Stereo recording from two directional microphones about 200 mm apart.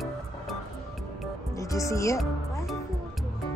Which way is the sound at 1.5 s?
15° left (ahead or behind).